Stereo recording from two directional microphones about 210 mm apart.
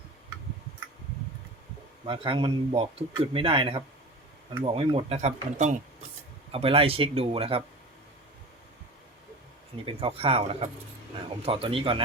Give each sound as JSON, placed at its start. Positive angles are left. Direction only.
{"t": 2.0, "sound": "speech", "side_deg": -25}
{"t": 9.8, "sound": "speech", "side_deg": -25}